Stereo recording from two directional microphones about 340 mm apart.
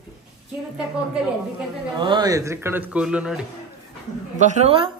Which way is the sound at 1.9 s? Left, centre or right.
Centre.